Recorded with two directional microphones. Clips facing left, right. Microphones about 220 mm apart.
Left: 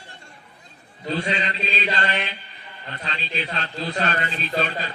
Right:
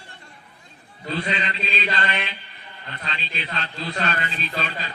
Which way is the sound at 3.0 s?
40° left (ahead or behind).